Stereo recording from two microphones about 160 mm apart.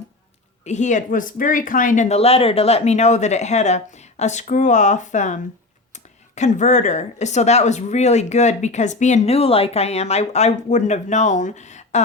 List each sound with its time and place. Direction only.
0.6 s speech: 45° left (ahead or behind)